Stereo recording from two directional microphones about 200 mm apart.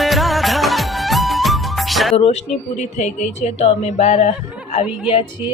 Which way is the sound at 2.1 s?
30° left (ahead or behind).